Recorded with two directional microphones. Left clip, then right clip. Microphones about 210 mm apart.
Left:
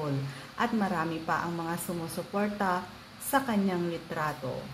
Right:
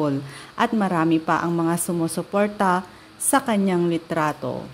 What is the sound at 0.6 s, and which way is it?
Speech, 45° right (ahead or behind).